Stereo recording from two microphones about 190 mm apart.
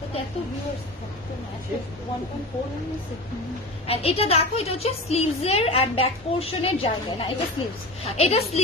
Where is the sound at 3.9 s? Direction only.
30° left (ahead or behind).